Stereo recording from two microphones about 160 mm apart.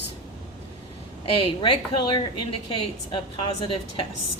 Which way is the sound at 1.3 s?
30° left (ahead or behind).